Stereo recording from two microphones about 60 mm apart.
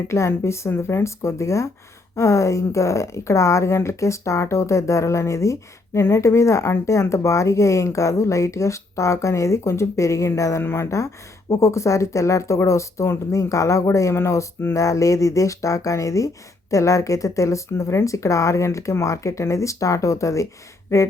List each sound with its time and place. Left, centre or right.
0.1 s a woman's voice: left
10.6 s speech: left
10.9 s a woman's voice: left